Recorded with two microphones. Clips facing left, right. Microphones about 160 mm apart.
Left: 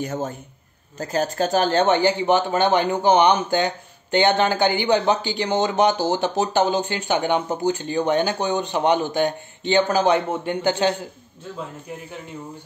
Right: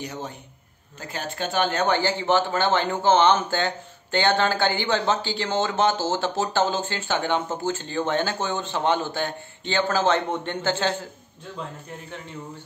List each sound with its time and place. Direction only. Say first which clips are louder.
0.0 s a man's voice: left 7 dB; 45° left (ahead or behind)
1.9 s speech: left 4 dB; 15° left (ahead or behind)